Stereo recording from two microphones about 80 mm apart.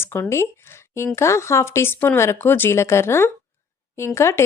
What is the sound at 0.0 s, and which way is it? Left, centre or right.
A woman's voice, left.